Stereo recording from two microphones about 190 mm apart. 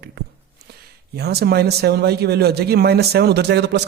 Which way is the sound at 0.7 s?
55° right (ahead or behind).